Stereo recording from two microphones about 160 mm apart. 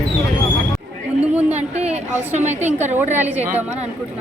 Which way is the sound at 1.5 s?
45° right (ahead or behind).